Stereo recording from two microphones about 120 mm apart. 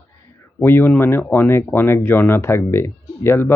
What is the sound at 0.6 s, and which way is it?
Speech, 20° left (ahead or behind).